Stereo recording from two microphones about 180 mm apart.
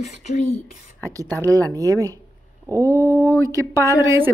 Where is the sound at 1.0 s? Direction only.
20° right (ahead or behind).